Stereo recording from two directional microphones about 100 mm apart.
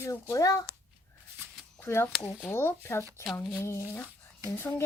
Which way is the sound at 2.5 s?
25° left (ahead or behind).